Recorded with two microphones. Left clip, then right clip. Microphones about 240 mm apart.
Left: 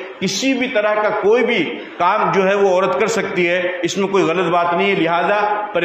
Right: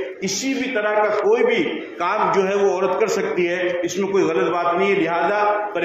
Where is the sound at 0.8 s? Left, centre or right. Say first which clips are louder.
Left 1 dB; left.